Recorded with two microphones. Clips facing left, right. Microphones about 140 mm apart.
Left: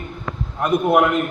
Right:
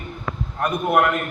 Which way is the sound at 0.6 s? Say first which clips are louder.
Left 3 dB; 15° left (ahead or behind).